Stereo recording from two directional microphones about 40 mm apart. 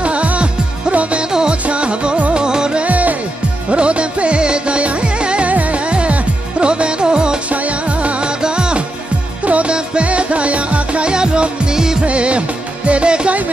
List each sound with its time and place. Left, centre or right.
0.0 s music: right
1.3 s music: centre
2.3 s music: right
2.8 s music: right
3.7 s music: right
5.5 s music: right
7.4 s music: right
9.4 s music: right; by 12.0 s centre
12.0 s music: right